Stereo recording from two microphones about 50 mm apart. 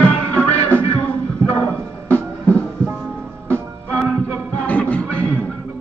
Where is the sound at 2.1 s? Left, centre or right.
Left.